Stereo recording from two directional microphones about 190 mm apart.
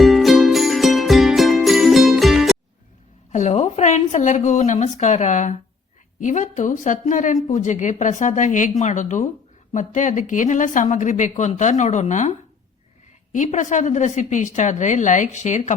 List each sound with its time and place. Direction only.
0.0 s music: centre (ahead or behind)
3.3 s a woman's voice: 35° left (ahead or behind)
13.3 s a woman's voice: 40° left (ahead or behind)